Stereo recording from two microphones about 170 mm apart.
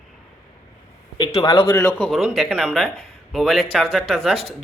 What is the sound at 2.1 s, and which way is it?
Speech, centre (ahead or behind).